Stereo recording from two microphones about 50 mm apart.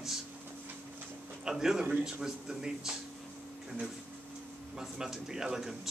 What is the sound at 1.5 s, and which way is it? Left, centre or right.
Speech, centre.